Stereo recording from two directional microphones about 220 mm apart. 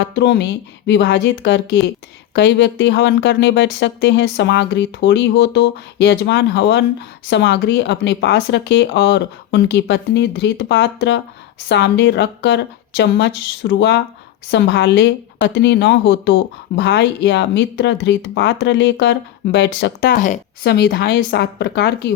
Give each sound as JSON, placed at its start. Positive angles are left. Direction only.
{"t": 0.0, "sound": "speech", "side_deg": 50}
{"t": 20.7, "sound": "speech", "side_deg": 45}